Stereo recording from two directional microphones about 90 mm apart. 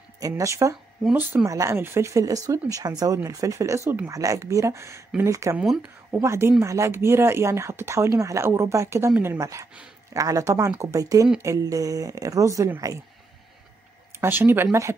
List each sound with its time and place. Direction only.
0.2 s speech: 35° right (ahead or behind)
5.6 s a woman's voice: 5° right (ahead or behind)
6.2 s speech: 30° right (ahead or behind)
14.2 s speech: 25° right (ahead or behind)